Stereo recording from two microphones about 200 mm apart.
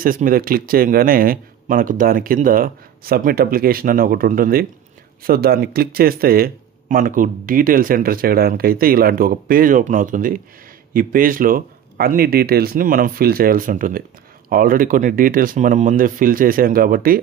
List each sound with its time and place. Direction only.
0.0 s speech: 45° right (ahead or behind)